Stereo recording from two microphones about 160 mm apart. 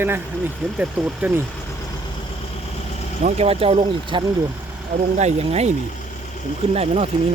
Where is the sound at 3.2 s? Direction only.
40° right (ahead or behind).